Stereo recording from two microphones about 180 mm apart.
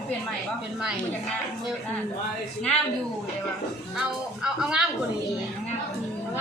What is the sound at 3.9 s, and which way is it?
Speech, 5° right (ahead or behind).